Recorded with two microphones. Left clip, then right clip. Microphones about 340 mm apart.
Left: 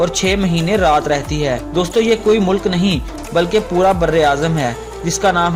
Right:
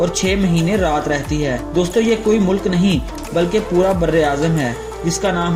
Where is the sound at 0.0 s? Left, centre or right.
Left.